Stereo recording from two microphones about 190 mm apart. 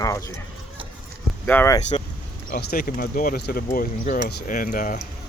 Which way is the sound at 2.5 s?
55° left (ahead or behind).